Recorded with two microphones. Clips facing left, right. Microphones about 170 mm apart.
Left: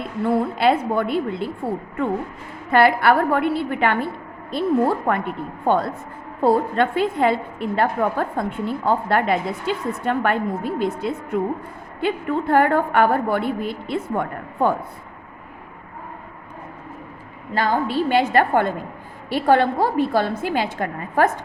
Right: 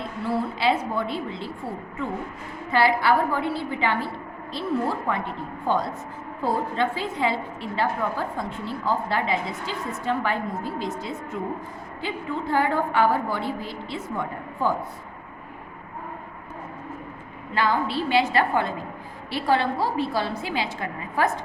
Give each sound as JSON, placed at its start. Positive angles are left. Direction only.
{"t": 0.3, "sound": "a woman's voice", "side_deg": 55}
{"t": 2.6, "sound": "a woman's voice", "side_deg": 55}
{"t": 17.5, "sound": "a woman's voice", "side_deg": 45}